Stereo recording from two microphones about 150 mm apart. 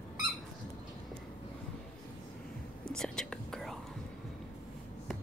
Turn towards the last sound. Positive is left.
turn(degrees=0)  # may be behind; listen again after turning